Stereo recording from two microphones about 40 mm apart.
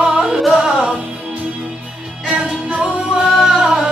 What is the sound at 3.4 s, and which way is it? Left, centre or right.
Music, centre.